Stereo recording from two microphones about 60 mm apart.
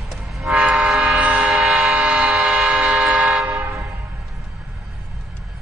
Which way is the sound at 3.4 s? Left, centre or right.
Right.